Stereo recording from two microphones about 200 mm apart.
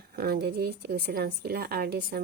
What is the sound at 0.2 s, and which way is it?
A woman's voice, 50° right (ahead or behind).